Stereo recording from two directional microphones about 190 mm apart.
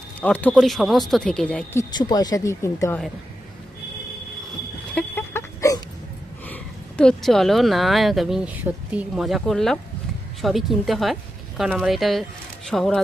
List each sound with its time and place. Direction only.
0.2 s speech: 10° left (ahead or behind)
1.8 s speech: 20° left (ahead or behind)
4.9 s a sound: 10° left (ahead or behind)
6.4 s speech: 5° left (ahead or behind)